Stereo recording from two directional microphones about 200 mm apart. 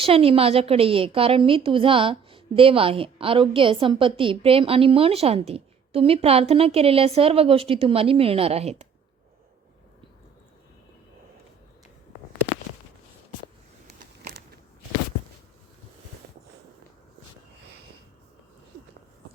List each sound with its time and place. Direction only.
0.0 s a woman's voice: 30° right (ahead or behind)